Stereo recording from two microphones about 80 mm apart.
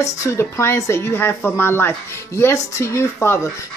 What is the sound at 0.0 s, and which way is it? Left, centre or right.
Speech, left.